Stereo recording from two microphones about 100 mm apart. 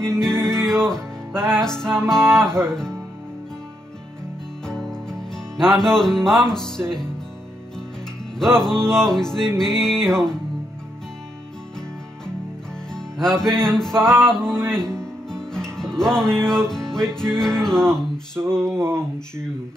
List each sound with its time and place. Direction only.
0.1 s music: 5° left (ahead or behind)
2.6 s speech: 5° left (ahead or behind)
4.6 s music: 5° left (ahead or behind)
8.4 s music: 5° left (ahead or behind)
12.9 s music: 5° left (ahead or behind)
14.3 s speech: 5° left (ahead or behind)
15.0 s music: 5° left (ahead or behind)
18.6 s male singing: 25° right (ahead or behind)
19.1 s speech: 5° left (ahead or behind)